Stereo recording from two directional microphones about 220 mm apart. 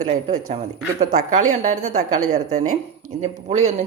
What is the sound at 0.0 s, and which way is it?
Speech, 35° right (ahead or behind).